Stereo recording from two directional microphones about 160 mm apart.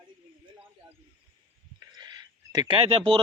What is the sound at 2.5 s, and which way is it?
Speech, 25° right (ahead or behind).